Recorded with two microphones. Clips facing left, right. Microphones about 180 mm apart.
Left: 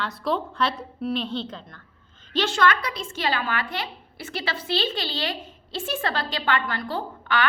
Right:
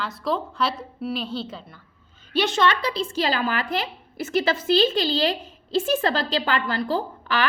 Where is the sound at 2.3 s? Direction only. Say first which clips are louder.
Right 1 dB; 20° right (ahead or behind).